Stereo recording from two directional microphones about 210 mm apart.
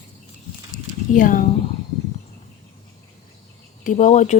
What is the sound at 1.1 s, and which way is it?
Speech, 40° left (ahead or behind).